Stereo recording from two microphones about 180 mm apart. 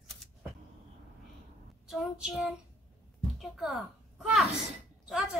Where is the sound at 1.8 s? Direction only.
Centre (ahead or behind).